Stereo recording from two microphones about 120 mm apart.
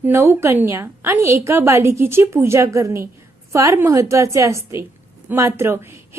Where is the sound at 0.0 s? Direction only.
20° right (ahead or behind).